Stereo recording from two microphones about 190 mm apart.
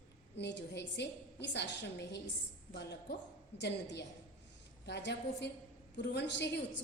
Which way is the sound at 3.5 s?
65° left (ahead or behind).